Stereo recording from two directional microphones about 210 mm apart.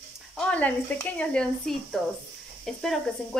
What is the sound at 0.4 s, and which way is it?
Speech, 5° left (ahead or behind).